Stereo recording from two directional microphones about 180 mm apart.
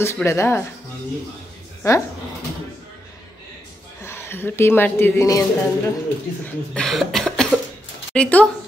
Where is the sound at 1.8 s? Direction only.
15° left (ahead or behind).